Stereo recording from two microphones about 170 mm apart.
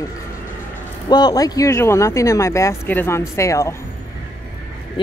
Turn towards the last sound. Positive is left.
turn(degrees=20)  # may be behind; listen again after turning